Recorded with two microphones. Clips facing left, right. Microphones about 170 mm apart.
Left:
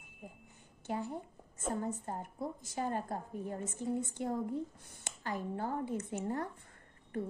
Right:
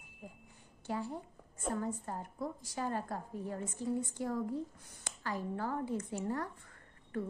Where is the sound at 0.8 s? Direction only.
20° left (ahead or behind).